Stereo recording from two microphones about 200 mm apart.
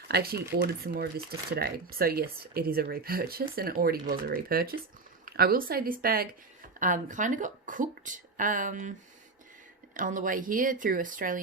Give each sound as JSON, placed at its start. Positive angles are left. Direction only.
{"t": 0.1, "sound": "speech", "side_deg": -50}